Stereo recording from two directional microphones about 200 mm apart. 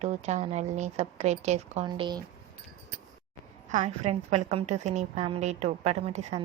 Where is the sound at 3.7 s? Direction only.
35° right (ahead or behind).